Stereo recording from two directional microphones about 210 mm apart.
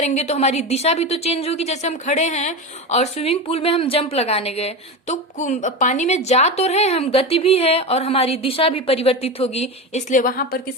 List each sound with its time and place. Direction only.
0.0 s a woman's voice: 35° left (ahead or behind)